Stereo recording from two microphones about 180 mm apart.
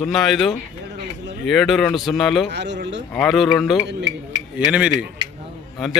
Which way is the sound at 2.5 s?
75° right (ahead or behind).